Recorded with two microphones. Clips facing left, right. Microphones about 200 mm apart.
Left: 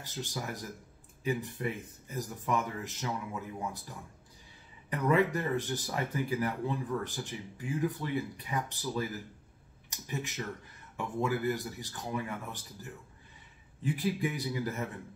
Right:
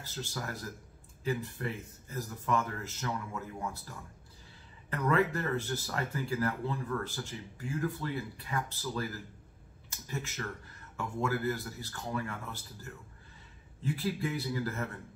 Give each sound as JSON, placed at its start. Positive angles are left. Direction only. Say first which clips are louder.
{"t": 0.0, "sound": "speech", "louder": "left 1 dB", "side_deg": 20}